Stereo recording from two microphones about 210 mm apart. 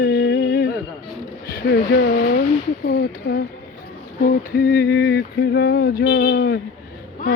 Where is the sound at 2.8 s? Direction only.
50° left (ahead or behind).